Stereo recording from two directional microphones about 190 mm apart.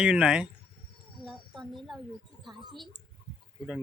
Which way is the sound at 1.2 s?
Centre (ahead or behind).